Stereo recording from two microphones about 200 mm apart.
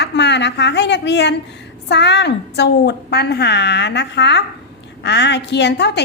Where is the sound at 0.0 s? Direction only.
60° left (ahead or behind).